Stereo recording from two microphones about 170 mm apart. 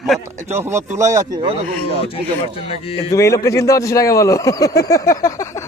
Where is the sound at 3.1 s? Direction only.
20° left (ahead or behind).